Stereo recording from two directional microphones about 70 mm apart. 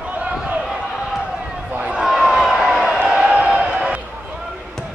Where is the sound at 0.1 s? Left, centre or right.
Centre.